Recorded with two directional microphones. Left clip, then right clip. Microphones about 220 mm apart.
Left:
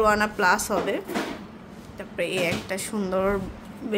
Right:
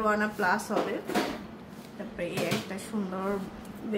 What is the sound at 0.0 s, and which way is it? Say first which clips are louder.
Speech: left 6 dB; 45° left (ahead or behind).